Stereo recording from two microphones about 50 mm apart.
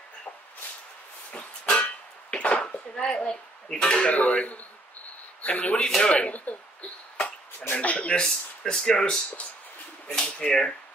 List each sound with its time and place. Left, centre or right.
1.3 s music: left
4.1 s speech: left
5.8 s speech: centre
6.1 s speech: left
8.6 s speech: centre